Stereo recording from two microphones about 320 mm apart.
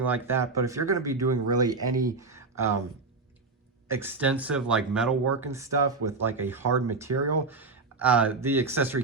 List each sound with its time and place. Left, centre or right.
0.0 s speech: centre
3.8 s speech: centre
7.1 s speech: right
7.4 s speech: centre